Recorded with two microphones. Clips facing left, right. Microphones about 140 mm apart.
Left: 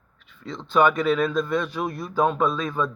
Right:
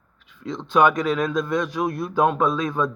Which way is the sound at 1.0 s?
40° right (ahead or behind).